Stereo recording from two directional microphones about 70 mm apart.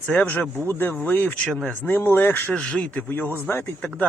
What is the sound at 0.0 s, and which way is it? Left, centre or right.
Speech, centre.